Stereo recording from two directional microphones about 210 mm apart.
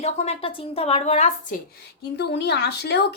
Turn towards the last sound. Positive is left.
turn(degrees=50)  # may be behind; listen again after turning